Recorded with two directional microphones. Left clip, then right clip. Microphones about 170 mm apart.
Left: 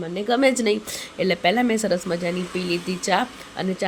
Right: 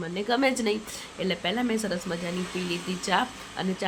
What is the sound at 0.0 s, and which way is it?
A woman's voice, 15° left (ahead or behind).